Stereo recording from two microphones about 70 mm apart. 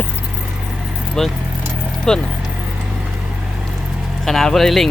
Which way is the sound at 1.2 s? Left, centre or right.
Centre.